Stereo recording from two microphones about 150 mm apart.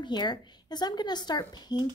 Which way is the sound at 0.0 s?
30° left (ahead or behind).